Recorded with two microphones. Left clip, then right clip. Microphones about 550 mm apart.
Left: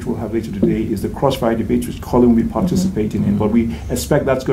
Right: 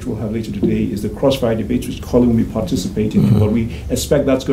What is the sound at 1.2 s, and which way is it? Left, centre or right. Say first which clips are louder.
Speech: right 1 dB; left.